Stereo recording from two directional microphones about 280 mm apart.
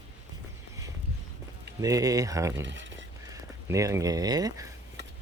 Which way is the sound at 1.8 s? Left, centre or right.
Centre.